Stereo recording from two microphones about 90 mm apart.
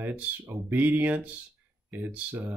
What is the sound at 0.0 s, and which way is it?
Speech, 20° right (ahead or behind).